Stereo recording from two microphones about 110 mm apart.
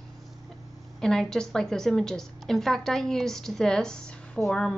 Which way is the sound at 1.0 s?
5° left (ahead or behind).